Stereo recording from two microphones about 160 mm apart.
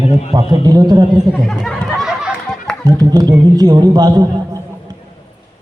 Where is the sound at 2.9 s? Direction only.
25° right (ahead or behind).